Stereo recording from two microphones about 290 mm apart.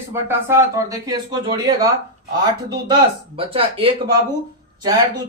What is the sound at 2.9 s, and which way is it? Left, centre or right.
Speech, centre.